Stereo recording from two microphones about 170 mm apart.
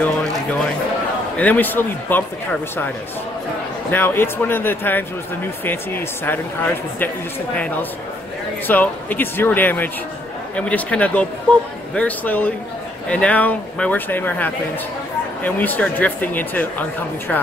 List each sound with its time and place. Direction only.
1.4 s speech: 10° left (ahead or behind)
3.9 s speech: 10° left (ahead or behind)